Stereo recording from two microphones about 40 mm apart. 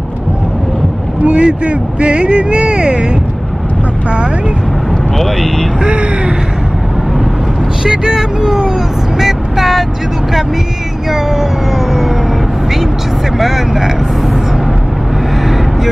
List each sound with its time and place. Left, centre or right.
1.2 s speech: right
5.1 s speech: centre
5.9 s speech: right
7.8 s speech: centre
9.2 s vehicle: centre
11.1 s speech: centre
13.4 s speech: centre
15.4 s vehicle: centre